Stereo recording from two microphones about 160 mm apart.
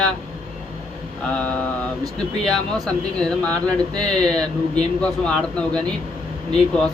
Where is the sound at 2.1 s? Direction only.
Centre (ahead or behind).